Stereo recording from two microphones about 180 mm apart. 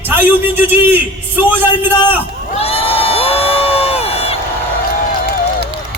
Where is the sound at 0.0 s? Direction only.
10° right (ahead or behind).